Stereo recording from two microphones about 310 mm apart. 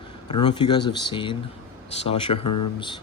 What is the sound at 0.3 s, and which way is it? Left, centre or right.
Speech, centre.